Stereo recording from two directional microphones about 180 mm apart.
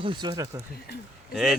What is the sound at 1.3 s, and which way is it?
Speech, centre (ahead or behind).